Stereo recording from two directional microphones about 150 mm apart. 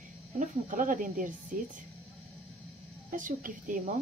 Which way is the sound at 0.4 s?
60° right (ahead or behind).